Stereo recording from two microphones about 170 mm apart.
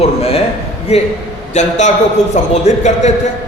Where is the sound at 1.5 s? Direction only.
45° left (ahead or behind).